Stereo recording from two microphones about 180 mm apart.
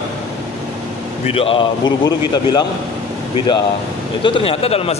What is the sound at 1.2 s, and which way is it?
A man's voice, 30° left (ahead or behind).